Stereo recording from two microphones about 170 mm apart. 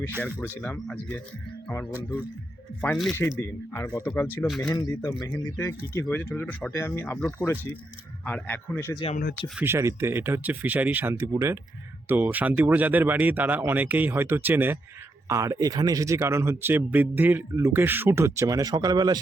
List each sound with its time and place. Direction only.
0.2 s speech: 10° left (ahead or behind)
3.4 s speech: 15° left (ahead or behind)
5.5 s speech: 15° left (ahead or behind)
9.6 s speech: 15° right (ahead or behind)